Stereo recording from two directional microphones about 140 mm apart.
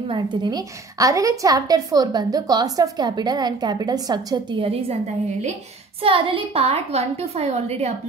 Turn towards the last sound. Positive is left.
turn(degrees=-50)  # may be behind; listen again after turning